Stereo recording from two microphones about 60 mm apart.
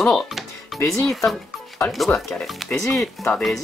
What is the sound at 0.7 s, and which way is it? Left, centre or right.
Speech, left.